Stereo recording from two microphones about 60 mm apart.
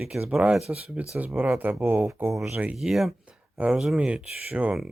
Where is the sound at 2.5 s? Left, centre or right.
Right.